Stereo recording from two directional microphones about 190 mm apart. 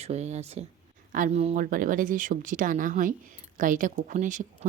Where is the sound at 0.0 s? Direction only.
35° right (ahead or behind).